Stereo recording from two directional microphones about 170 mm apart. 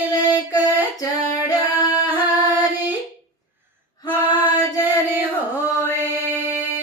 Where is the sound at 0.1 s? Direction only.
20° left (ahead or behind).